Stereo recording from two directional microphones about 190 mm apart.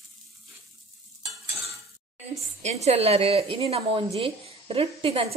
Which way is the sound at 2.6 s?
35° right (ahead or behind).